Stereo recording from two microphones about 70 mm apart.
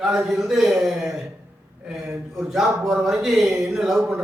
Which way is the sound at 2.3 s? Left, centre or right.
Centre.